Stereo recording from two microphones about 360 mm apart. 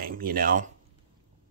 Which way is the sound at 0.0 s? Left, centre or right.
Right.